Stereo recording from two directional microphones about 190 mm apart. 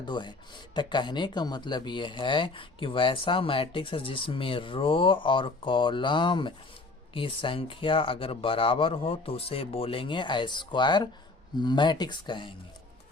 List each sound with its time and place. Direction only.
0.0 s speech: 25° left (ahead or behind)